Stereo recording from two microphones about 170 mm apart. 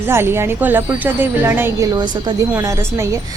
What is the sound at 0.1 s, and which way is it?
A woman's voice, 15° right (ahead or behind).